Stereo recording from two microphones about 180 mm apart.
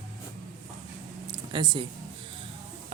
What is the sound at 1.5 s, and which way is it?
Speech, 25° right (ahead or behind).